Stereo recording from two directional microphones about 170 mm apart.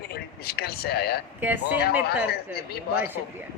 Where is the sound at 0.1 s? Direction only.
70° left (ahead or behind).